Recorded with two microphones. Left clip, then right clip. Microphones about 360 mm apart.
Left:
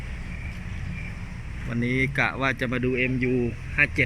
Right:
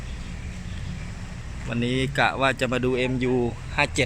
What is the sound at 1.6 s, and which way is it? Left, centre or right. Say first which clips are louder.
Speech: left 1 dB; centre.